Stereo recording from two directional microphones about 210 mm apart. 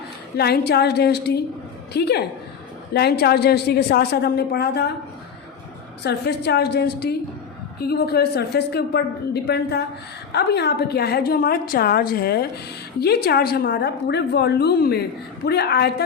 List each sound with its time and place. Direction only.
0.3 s a woman's voice: 50° left (ahead or behind)
6.0 s a woman's voice: 50° left (ahead or behind)